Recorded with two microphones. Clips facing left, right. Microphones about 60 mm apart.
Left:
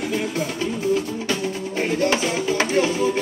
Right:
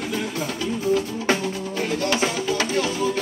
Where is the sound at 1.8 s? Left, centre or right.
Left.